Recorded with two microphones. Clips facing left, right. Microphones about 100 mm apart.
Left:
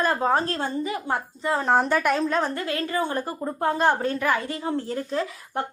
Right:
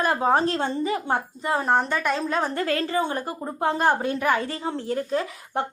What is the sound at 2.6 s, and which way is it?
Speech, 35° right (ahead or behind).